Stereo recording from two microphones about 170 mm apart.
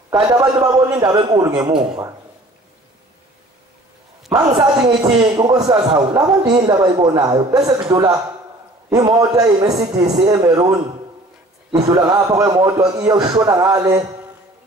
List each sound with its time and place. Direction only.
0.4 s a man's voice: 25° right (ahead or behind)
4.3 s a man's voice: 25° right (ahead or behind)
11.7 s a man's voice: 25° right (ahead or behind)